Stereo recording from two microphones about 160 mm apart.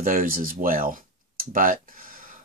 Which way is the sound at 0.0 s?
65° right (ahead or behind).